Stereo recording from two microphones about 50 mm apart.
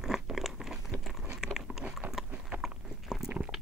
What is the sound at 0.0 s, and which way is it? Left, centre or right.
Crunch, centre.